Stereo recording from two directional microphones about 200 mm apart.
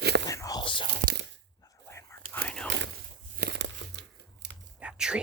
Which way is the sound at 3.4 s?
60° right (ahead or behind).